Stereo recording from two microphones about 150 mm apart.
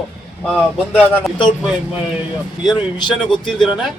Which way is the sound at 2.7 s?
30° left (ahead or behind).